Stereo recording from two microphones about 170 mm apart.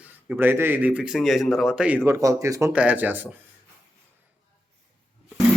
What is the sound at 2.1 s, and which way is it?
Speech, 15° right (ahead or behind).